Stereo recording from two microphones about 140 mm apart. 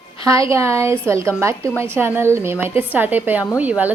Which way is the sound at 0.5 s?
20° right (ahead or behind).